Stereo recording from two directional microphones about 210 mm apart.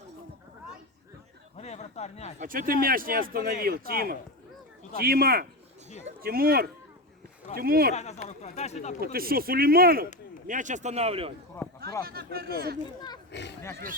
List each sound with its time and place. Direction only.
1.5 s a sound: 30° left (ahead or behind)
2.4 s speech: 40° right (ahead or behind)
7.9 s speech: 35° left (ahead or behind)
9.1 s speech: 45° right (ahead or behind); by 11.3 s 30° right (ahead or behind)
12.0 s speech: 45° right (ahead or behind)
13.3 s speech: 55° left (ahead or behind)